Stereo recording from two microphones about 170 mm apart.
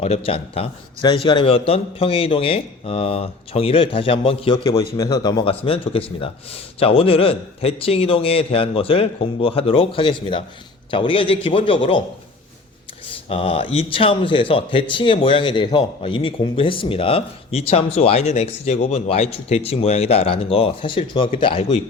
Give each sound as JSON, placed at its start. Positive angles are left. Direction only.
{"t": 0.0, "sound": "speech", "side_deg": 35}
{"t": 13.2, "sound": "speech", "side_deg": 35}